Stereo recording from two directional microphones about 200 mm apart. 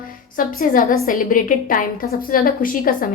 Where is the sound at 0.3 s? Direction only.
45° left (ahead or behind).